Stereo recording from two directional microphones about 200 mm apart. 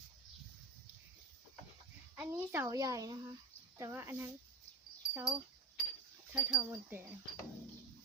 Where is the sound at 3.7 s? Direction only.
15° right (ahead or behind).